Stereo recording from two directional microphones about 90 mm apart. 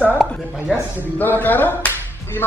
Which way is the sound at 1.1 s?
20° left (ahead or behind).